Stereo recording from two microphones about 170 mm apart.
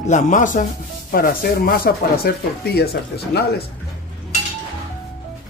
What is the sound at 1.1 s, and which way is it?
Speech, 60° left (ahead or behind).